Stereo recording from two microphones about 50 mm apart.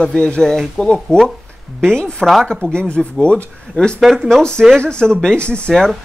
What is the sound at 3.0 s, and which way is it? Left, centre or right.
Speech, centre.